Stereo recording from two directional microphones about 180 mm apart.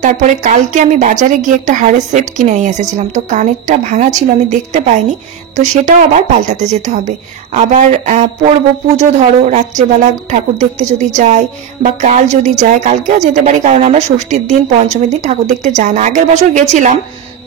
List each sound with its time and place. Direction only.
0.0 s a woman's voice: 40° right (ahead or behind)